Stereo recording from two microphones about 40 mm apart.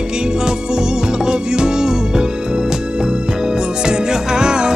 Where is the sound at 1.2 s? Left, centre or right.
Centre.